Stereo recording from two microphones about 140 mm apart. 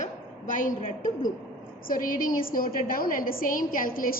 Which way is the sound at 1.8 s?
85° left.